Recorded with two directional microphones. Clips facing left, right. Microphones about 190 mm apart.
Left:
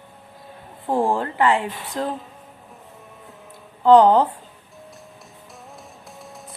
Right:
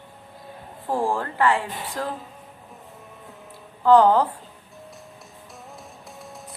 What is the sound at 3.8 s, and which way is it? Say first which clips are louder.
Speech: left 3 dB; 20° left (ahead or behind).